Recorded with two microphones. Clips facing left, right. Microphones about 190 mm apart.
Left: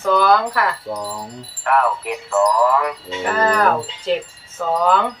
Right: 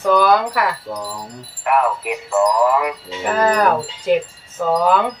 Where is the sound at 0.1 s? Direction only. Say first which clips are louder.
Right 1 dB; 15° right (ahead or behind).